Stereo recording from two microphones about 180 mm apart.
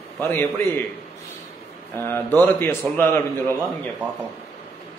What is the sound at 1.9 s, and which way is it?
Speech, 10° left (ahead or behind).